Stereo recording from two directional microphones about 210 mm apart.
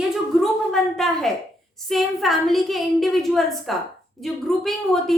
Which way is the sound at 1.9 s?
Centre (ahead or behind).